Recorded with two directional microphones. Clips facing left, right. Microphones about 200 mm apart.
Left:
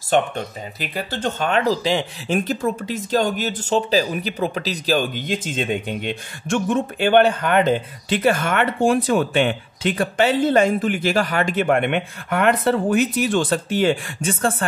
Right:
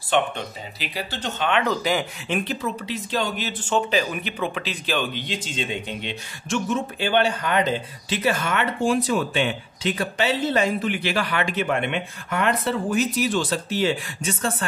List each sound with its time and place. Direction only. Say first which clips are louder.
0.1 s speech: left 3 dB; 40° left (ahead or behind); by 2.0 s 25° left (ahead or behind)
2.2 s speech: left 5 dB; 40° left (ahead or behind)